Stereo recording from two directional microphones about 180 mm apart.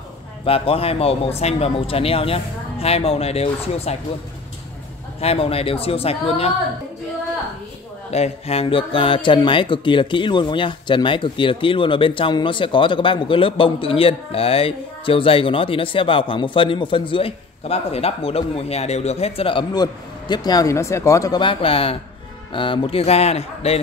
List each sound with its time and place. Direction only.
0.5 s speech: 30° left (ahead or behind)
5.2 s speech: 35° left (ahead or behind)
8.1 s speech: 35° left (ahead or behind)